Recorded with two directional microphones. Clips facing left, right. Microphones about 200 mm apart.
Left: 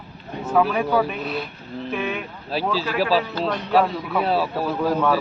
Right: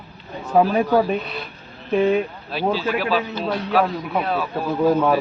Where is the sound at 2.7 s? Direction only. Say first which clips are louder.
Even; 35° left (ahead or behind).